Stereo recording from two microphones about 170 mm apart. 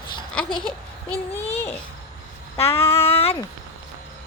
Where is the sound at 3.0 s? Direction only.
35° left (ahead or behind).